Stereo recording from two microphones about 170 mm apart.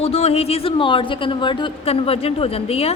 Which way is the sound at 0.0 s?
35° left (ahead or behind).